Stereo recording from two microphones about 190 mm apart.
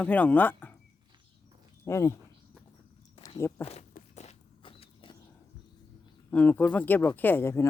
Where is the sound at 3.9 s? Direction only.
35° left (ahead or behind).